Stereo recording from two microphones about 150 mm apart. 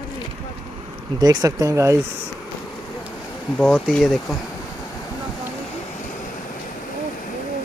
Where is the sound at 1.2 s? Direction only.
25° right (ahead or behind).